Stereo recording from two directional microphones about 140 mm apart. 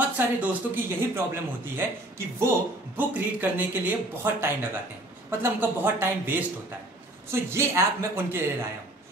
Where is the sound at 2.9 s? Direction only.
10° right (ahead or behind).